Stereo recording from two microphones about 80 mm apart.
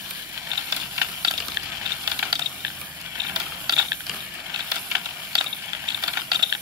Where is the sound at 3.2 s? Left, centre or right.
Right.